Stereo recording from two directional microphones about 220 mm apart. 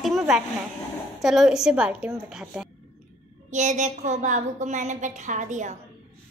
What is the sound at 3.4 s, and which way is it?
A woman's voice, 35° right (ahead or behind).